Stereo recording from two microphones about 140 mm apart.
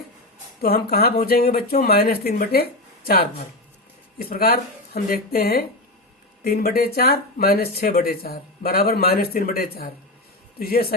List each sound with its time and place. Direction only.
0.6 s speech: 90° left
4.2 s speech: 90° left